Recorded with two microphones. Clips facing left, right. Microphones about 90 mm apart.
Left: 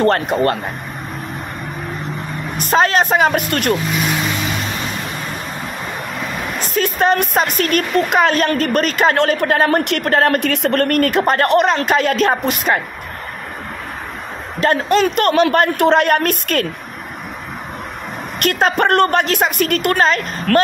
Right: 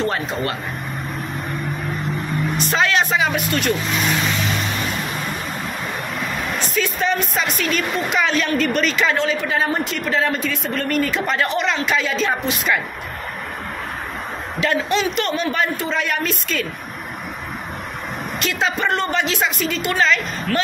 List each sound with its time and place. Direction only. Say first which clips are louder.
0.0 s a woman's voice: left 8 dB; 60° left (ahead or behind)
2.5 s a woman's voice: left 6 dB; 45° left (ahead or behind)
6.6 s a woman's voice: left 7 dB; 50° left (ahead or behind)
14.6 s a woman's voice: left 5 dB; 45° left (ahead or behind)
18.4 s a woman's voice: left 7 dB; 55° left (ahead or behind)